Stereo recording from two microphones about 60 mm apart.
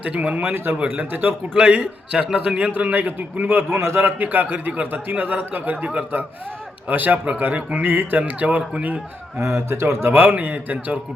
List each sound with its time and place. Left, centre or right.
0.0 s a man's voice: right
0.5 s a man's voice: right
1.5 s a man's voice: centre
2.7 s a man's voice: right
9.4 s a man's voice: right